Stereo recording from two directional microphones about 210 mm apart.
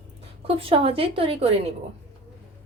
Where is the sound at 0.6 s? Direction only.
25° right (ahead or behind).